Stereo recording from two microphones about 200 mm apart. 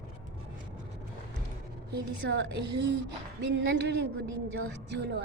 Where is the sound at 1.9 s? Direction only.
55° right (ahead or behind).